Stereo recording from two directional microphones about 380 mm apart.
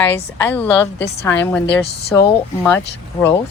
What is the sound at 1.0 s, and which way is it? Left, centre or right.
Speech, left.